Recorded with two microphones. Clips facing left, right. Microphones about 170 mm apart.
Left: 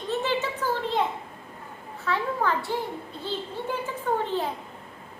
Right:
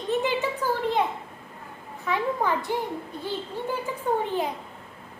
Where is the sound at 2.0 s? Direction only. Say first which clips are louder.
Right 1 dB; 15° right (ahead or behind).